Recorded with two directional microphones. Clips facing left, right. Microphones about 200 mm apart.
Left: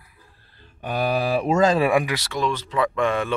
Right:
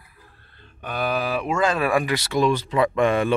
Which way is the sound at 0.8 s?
35° left (ahead or behind).